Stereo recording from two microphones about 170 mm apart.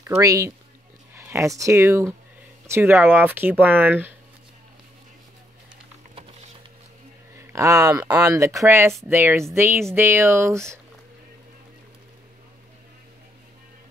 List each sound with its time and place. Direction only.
0.0 s speech: 20° right (ahead or behind)
7.3 s speech: 20° right (ahead or behind)